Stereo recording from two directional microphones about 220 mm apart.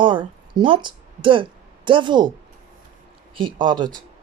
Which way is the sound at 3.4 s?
20° right (ahead or behind).